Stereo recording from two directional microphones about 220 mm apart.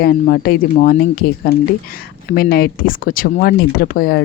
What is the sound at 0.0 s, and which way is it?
Speech, 45° left (ahead or behind).